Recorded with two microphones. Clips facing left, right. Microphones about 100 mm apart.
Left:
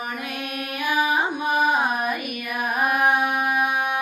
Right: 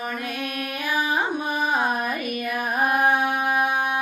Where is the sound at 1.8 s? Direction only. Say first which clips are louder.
Even; 15° left (ahead or behind).